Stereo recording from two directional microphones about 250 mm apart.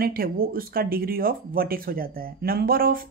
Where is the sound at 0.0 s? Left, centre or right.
Right.